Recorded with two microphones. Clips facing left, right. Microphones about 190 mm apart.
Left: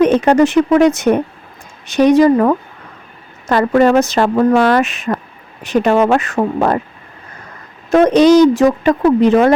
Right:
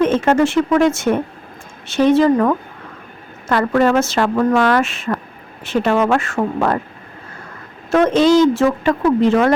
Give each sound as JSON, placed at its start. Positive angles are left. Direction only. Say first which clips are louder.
{"t": 0.0, "sound": "speech", "louder": "left 4 dB", "side_deg": 15}
{"t": 3.8, "sound": "speech", "louder": "left 4 dB", "side_deg": 15}
{"t": 7.9, "sound": "speech", "louder": "left 4 dB", "side_deg": 15}